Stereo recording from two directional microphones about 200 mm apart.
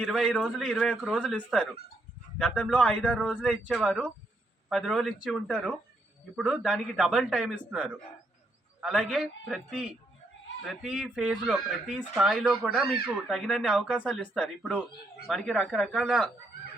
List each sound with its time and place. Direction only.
0.0 s speech: centre (ahead or behind)